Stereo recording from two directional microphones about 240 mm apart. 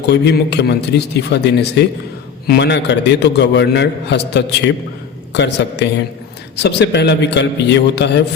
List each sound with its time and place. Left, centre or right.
0.1 s a man's voice: left